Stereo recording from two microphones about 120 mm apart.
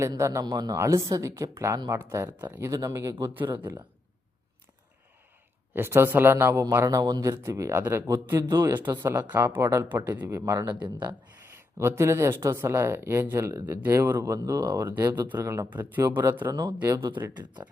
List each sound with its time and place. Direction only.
0.0 s speech: 25° right (ahead or behind)
2.6 s speech: 30° right (ahead or behind)
3.4 s speech: 40° right (ahead or behind)
5.7 s speech: 20° right (ahead or behind)
14.2 s speech: 30° right (ahead or behind)
15.3 s speech: 20° right (ahead or behind)
16.5 s speech: 30° right (ahead or behind)
16.9 s speech: 40° right (ahead or behind)